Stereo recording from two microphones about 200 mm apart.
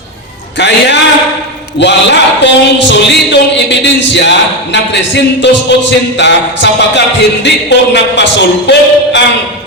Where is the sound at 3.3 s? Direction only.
60° left (ahead or behind).